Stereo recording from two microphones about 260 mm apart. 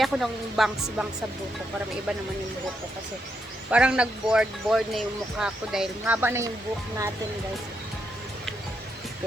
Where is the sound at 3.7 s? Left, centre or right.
Centre.